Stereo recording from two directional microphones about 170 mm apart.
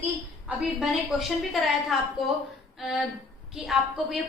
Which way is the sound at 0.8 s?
Centre (ahead or behind).